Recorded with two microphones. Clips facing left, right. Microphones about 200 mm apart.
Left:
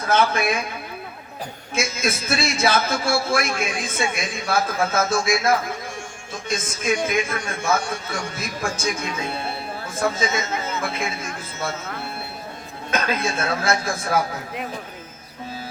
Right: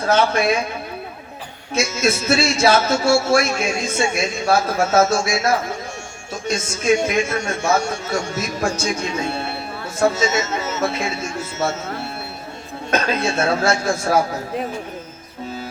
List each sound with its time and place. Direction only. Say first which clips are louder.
0.0 s a man's voice: right 3 dB; 30° right (ahead or behind)
2.0 s a man's voice: right 7 dB; 30° right (ahead or behind)